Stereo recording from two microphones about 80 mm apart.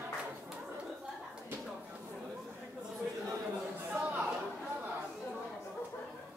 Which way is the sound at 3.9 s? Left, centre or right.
Centre.